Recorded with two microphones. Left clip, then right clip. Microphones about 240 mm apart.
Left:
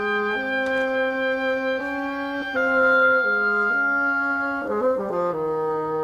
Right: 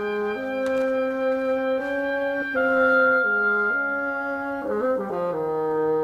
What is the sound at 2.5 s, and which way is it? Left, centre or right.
Music, left.